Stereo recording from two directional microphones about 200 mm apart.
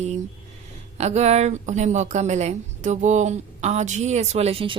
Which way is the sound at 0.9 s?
35° right (ahead or behind).